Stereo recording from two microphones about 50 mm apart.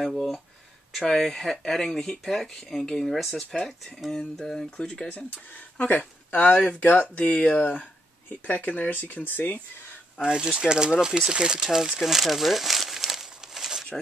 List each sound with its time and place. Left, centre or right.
0.0 s speech: centre
4.1 s a sound: centre
4.6 s speech: left
5.1 s speech: left
7.2 s speech: left
10.2 s speech: centre
13.3 s crumpling: centre